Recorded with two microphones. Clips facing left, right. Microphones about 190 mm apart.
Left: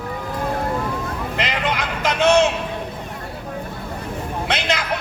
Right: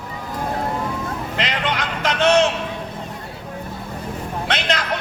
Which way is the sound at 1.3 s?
5° left (ahead or behind).